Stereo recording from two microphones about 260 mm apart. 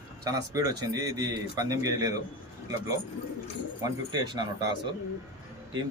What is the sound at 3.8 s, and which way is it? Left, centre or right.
Speech, centre.